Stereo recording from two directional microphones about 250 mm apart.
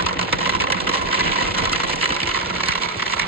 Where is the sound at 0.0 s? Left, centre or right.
Right.